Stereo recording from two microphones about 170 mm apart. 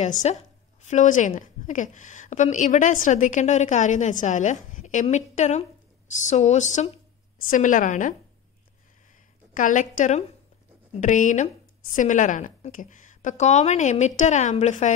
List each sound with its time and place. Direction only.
0.2 s a woman's voice: 40° left (ahead or behind)
9.5 s a woman's voice: 50° left (ahead or behind)